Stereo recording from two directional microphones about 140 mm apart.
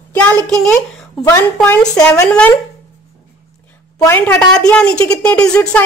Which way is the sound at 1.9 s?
20° left (ahead or behind).